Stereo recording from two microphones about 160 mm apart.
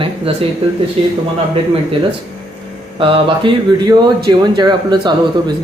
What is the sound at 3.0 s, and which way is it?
Speech, 30° right (ahead or behind).